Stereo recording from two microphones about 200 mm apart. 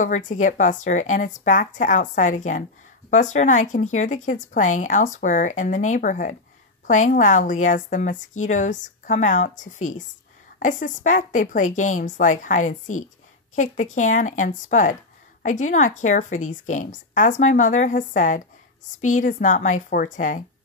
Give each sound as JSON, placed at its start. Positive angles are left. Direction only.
{"t": 0.0, "sound": "speech", "side_deg": 40}